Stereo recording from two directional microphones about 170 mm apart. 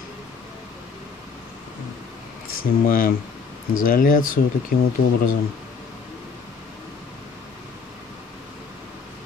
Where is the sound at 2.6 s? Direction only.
55° left (ahead or behind).